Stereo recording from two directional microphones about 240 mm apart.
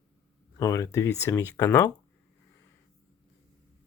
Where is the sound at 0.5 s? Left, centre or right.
Centre.